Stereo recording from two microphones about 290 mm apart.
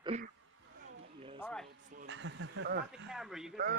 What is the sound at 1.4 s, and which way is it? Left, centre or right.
Speech, centre.